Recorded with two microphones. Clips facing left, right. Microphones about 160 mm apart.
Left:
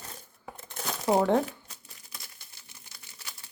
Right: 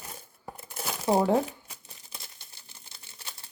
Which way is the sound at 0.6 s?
5° right (ahead or behind).